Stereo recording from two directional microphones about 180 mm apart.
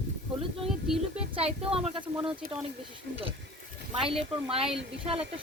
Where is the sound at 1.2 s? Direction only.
30° right (ahead or behind).